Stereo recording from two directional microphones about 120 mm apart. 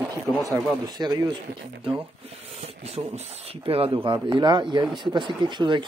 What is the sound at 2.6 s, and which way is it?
Speech, 60° right (ahead or behind).